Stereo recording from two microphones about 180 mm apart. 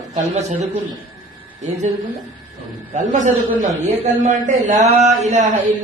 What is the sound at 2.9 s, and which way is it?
Speech, 40° right (ahead or behind).